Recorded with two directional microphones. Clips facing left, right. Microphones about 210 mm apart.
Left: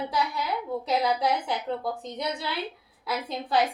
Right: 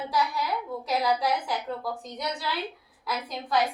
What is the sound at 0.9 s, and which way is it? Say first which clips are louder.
A woman's voice: even; 25° left (ahead or behind).